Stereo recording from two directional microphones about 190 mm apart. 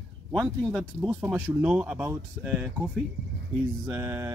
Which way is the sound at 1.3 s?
10° right (ahead or behind).